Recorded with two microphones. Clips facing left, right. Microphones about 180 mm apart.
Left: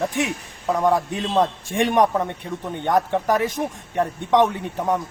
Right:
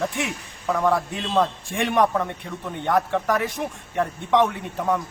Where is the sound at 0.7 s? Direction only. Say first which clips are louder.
Left 2 dB; 20° left (ahead or behind).